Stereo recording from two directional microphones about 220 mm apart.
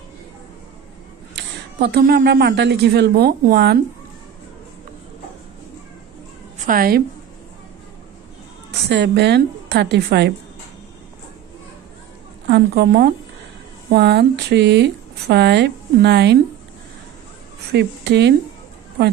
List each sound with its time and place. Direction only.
1.3 s a woman's voice: 50° right (ahead or behind)
6.6 s a woman's voice: 40° right (ahead or behind)
8.8 s speech: 50° right (ahead or behind)
12.4 s speech: 45° right (ahead or behind)
17.7 s speech: 50° right (ahead or behind)